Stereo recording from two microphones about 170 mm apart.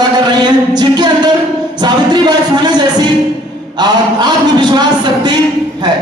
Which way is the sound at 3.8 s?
25° right (ahead or behind).